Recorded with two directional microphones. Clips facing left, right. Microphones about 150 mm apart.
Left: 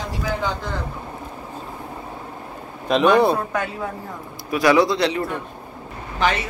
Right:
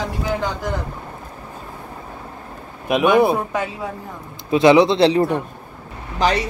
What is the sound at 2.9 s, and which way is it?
Speech, 10° right (ahead or behind).